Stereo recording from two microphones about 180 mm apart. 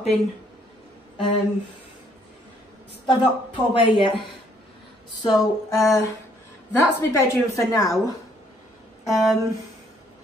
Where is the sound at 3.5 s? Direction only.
25° left (ahead or behind).